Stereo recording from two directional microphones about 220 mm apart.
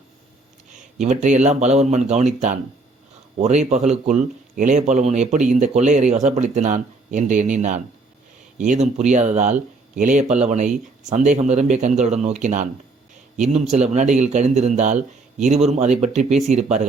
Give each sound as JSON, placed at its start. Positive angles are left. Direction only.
{"t": 1.0, "sound": "a man's voice", "side_deg": -30}